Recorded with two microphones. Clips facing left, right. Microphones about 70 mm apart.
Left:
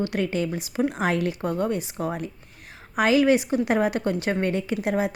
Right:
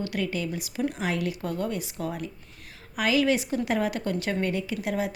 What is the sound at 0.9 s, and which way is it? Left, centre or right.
A woman's voice, left.